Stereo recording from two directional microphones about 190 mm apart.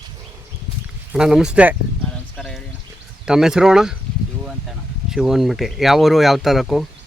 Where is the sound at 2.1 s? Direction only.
5° left (ahead or behind).